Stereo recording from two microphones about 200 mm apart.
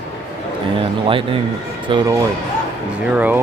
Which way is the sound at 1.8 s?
20° right (ahead or behind).